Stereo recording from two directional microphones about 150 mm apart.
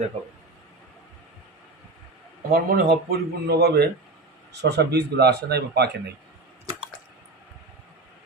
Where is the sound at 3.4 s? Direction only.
90° right.